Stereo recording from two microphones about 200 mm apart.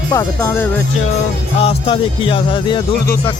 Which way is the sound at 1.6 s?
25° left (ahead or behind).